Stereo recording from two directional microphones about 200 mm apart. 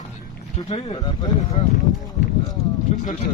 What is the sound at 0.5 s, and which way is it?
Speech, 30° left (ahead or behind).